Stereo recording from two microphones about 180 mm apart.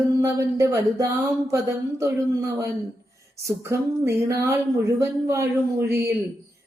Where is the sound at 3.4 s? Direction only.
15° right (ahead or behind).